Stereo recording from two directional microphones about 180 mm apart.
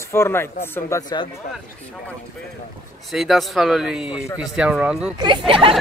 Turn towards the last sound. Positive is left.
turn(degrees=-30)  # may be behind; listen again after turning